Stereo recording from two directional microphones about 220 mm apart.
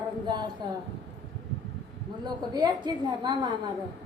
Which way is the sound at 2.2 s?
20° right (ahead or behind).